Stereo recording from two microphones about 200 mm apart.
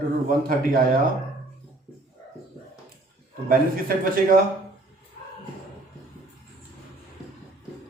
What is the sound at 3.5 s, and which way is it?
Speech, 45° right (ahead or behind).